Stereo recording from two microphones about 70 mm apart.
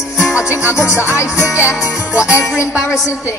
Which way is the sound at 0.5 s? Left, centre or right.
Right.